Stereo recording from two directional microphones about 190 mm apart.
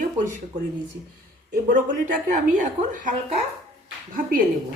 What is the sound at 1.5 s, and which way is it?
A woman's voice, 45° right (ahead or behind).